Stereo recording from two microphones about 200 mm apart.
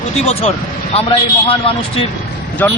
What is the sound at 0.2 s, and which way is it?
Speech, 30° left (ahead or behind).